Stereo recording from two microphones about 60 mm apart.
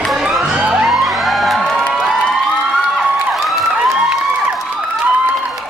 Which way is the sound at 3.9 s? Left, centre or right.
Centre.